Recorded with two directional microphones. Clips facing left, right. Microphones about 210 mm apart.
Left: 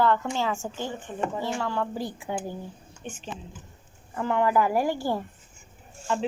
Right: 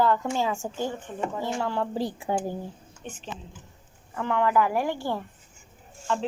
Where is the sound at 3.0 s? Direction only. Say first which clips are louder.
Left 1 dB; 5° left (ahead or behind).